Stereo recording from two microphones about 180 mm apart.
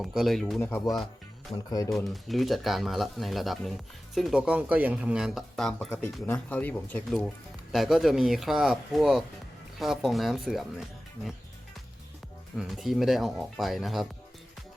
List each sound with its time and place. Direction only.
0.0 s speech: centre (ahead or behind)
1.5 s speech: 20° left (ahead or behind)
2.0 s speech: centre (ahead or behind)
12.5 s speech: centre (ahead or behind)